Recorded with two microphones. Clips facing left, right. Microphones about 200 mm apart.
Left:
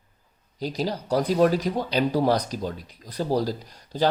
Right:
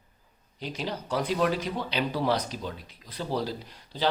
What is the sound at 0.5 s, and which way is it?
Speech, 40° left (ahead or behind).